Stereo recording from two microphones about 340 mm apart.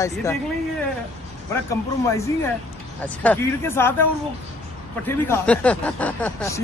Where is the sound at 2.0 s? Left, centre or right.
Centre.